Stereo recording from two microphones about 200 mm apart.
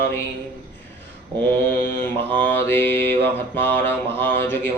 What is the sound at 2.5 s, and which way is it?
Mantra, 10° left (ahead or behind).